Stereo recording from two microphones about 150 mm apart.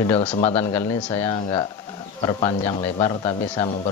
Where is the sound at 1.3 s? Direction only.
30° left (ahead or behind).